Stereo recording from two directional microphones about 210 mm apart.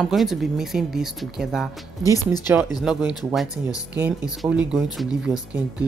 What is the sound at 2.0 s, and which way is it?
Speech, 15° left (ahead or behind).